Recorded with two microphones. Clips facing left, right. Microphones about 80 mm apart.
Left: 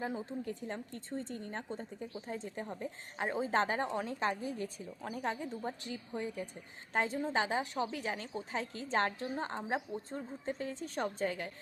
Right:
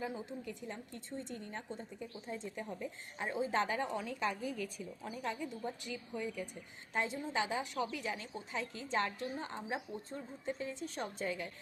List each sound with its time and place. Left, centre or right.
0.4 s a woman's voice: left
3.6 s a woman's voice: left
3.9 s a woman's voice: left
5.1 s a woman's voice: left
5.5 s a woman's voice: left
7.8 s a woman's voice: left